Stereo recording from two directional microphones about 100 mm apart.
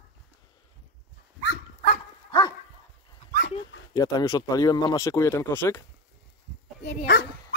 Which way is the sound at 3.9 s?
35° left (ahead or behind).